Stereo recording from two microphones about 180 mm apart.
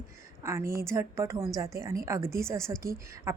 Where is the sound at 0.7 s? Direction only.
15° right (ahead or behind).